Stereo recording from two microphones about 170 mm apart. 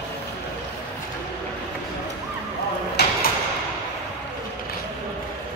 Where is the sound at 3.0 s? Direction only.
70° left (ahead or behind).